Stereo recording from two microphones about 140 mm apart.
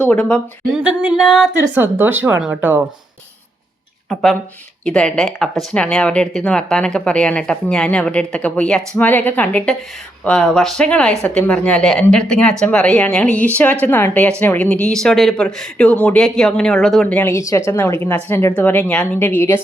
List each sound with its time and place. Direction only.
0.1 s speech: 10° left (ahead or behind)
0.7 s speech: 5° right (ahead or behind)
1.8 s speech: 15° right (ahead or behind)
4.1 s speech: centre (ahead or behind)
17.3 s a woman's voice: 20° left (ahead or behind)